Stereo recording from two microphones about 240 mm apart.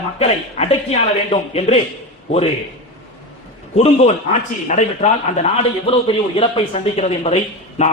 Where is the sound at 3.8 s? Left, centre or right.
Left.